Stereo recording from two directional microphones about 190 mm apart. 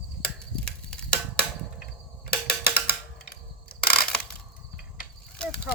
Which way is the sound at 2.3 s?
55° left (ahead or behind).